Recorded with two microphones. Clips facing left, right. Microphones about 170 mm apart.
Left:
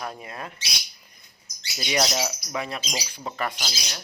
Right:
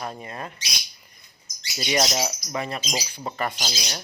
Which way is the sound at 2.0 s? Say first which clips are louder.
Right 1 dB; 20° right (ahead or behind).